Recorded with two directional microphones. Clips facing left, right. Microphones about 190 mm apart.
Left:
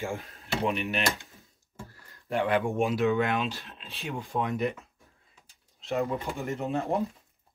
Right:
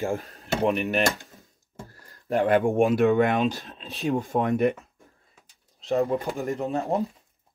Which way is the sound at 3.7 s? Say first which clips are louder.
Right 11 dB; 40° right (ahead or behind).